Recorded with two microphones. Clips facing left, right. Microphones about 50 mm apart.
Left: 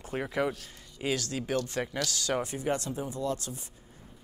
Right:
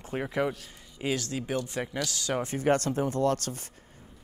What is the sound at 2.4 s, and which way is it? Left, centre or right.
Speech, right.